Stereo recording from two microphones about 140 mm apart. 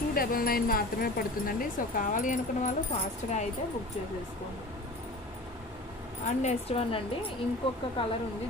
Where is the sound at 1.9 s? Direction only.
70° left (ahead or behind).